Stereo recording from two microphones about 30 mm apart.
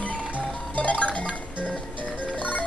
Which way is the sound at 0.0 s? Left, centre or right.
Left.